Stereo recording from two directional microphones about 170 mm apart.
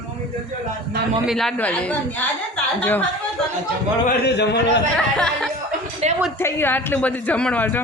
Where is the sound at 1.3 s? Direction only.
Centre (ahead or behind).